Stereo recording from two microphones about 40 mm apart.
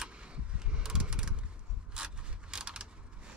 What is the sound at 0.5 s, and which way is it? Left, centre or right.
Mechanisms, right.